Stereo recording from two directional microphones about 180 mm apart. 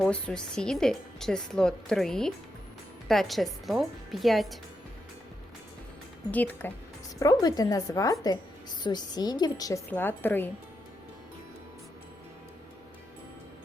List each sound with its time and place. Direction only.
0.0 s speech: 5° left (ahead or behind)
6.3 s speech: 10° left (ahead or behind)
7.2 s a woman's voice: 20° left (ahead or behind)